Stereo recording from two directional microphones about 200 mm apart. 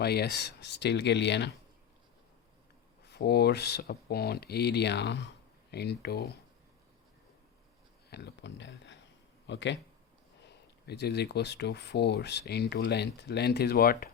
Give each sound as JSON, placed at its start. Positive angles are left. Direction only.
{"t": 0.0, "sound": "speech", "side_deg": 55}
{"t": 3.0, "sound": "speech", "side_deg": 55}
{"t": 8.1, "sound": "speech", "side_deg": 60}
{"t": 10.8, "sound": "speech", "side_deg": 55}